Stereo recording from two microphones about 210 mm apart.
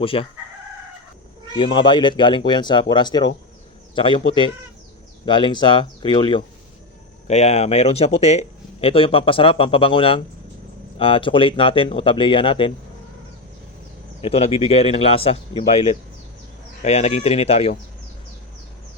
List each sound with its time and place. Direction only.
0.0 s speech: 25° left (ahead or behind)
1.5 s a man's voice: 25° left (ahead or behind)
5.2 s speech: 20° left (ahead or behind)
14.2 s speech: 30° left (ahead or behind)